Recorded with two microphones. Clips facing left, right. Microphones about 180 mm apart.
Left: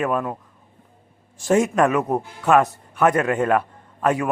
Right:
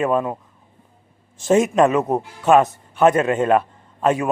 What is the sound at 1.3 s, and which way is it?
A man's voice, 20° right (ahead or behind).